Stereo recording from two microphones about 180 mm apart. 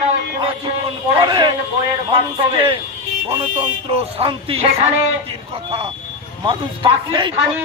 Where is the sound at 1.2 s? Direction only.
25° right (ahead or behind).